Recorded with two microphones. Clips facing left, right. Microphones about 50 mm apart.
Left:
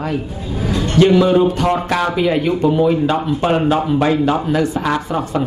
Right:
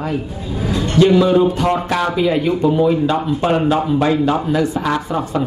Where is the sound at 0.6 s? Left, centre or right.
Right.